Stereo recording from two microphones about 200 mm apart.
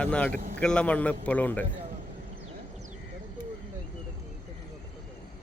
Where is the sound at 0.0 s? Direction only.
5° left (ahead or behind).